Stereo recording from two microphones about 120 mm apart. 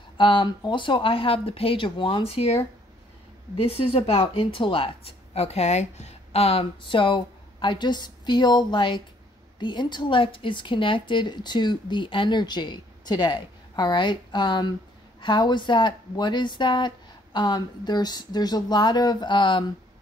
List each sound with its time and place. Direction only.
0.2 s a woman's voice: 40° left (ahead or behind)